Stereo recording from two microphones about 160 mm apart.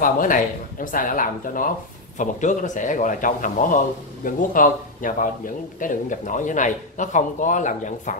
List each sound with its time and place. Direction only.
0.0 s a man's voice: 60° left (ahead or behind)